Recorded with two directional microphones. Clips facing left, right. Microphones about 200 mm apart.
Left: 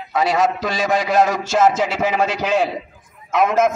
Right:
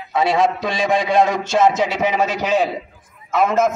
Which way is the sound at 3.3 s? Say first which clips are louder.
Even; centre (ahead or behind).